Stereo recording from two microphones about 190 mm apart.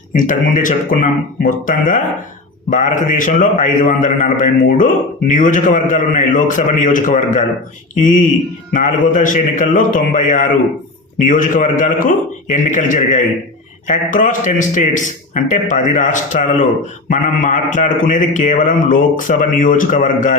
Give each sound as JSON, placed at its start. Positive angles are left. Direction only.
{"t": 0.1, "sound": "a man's voice", "side_deg": 45}